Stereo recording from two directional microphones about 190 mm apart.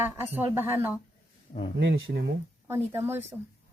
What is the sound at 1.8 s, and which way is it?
Speech, 80° right.